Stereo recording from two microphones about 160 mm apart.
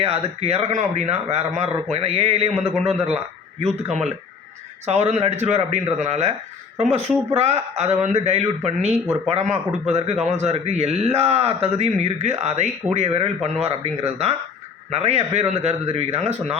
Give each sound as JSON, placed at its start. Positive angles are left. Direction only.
{"t": 0.0, "sound": "a man's voice", "side_deg": -40}